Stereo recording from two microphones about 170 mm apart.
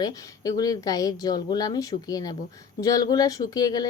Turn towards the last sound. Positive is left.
turn(degrees=25)  # may be behind; listen again after turning